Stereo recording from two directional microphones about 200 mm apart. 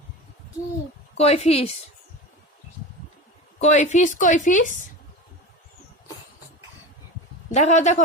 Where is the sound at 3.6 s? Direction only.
35° left (ahead or behind).